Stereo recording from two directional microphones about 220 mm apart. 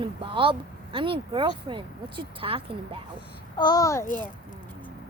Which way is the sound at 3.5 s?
15° left (ahead or behind).